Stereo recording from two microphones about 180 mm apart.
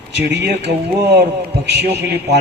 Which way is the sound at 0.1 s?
70° right (ahead or behind).